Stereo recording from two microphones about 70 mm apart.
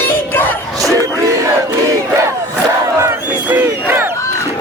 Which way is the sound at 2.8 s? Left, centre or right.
Right.